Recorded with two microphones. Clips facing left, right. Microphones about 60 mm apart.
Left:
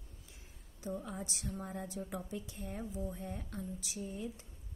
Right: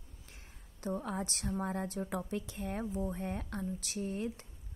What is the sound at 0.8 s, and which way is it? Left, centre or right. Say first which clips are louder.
A woman's voice: right 5 dB; right.